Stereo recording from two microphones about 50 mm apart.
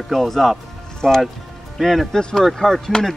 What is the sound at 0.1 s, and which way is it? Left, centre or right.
Speech, centre.